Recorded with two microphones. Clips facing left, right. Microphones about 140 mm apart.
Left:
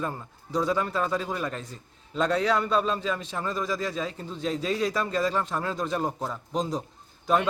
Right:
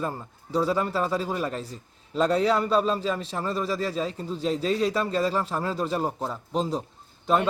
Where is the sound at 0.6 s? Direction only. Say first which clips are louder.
Even; 5° right (ahead or behind).